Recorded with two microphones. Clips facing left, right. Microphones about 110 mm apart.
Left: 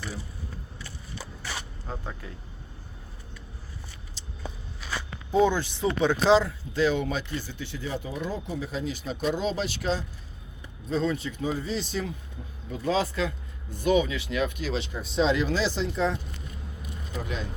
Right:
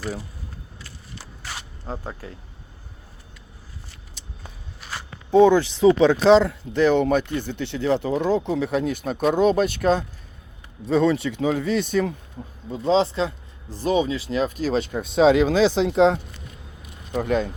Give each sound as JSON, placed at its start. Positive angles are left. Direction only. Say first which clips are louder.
{"t": 5.5, "sound": "speech", "louder": "right 11 dB", "side_deg": -90}
{"t": 10.8, "sound": "speech", "louder": "right 8 dB", "side_deg": -85}
{"t": 12.6, "sound": "a man's voice", "louder": "right 7 dB", "side_deg": -25}
{"t": 15.1, "sound": "speech", "louder": "right 8 dB", "side_deg": -80}
{"t": 17.2, "sound": "speech", "louder": "right 12 dB", "side_deg": -60}